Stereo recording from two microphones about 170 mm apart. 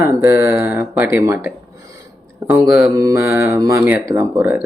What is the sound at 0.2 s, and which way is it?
Speech, 15° right (ahead or behind).